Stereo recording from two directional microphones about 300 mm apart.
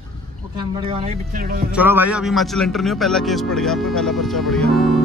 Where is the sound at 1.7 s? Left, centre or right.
Centre.